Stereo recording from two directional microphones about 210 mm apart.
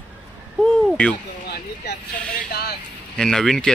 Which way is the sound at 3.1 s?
5° left (ahead or behind).